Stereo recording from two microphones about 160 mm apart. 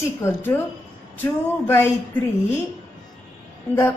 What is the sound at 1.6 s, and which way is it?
Speech, 15° left (ahead or behind).